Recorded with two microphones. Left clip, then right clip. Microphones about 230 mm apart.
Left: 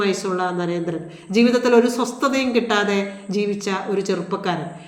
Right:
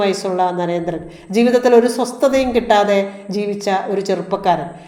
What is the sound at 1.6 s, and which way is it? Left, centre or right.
Speech, left.